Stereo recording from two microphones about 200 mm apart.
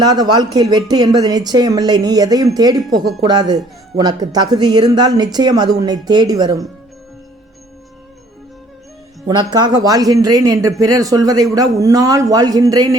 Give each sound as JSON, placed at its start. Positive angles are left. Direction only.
{"t": 0.0, "sound": "speech", "side_deg": -20}
{"t": 9.2, "sound": "speech", "side_deg": -20}